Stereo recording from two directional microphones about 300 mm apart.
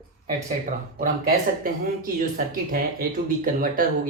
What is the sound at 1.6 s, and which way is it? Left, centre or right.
Speech, right.